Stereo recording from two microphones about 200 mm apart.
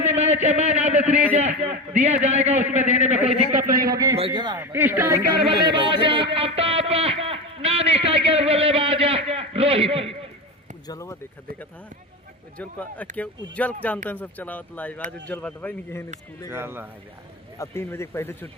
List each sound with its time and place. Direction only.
0.4 s a man's voice: 35° right (ahead or behind)
2.5 s speech: 10° right (ahead or behind)
2.9 s a man's voice: 35° right (ahead or behind)
3.9 s speech: 15° right (ahead or behind)
4.5 s speech: 10° right (ahead or behind)
5.5 s speech: 25° right (ahead or behind)
6.3 s a sound: 30° right (ahead or behind)
10.8 s speech: 15° left (ahead or behind)
12.5 s speech: 5° left (ahead or behind)
16.5 s speech: 10° right (ahead or behind)
17.6 s speech: 15° left (ahead or behind)